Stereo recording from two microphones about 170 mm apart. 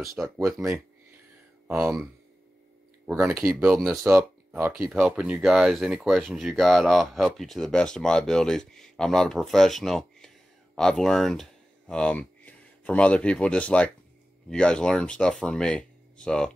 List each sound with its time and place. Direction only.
0.2 s speech: 10° right (ahead or behind)
3.2 s speech: 15° right (ahead or behind); by 16.5 s 5° left (ahead or behind)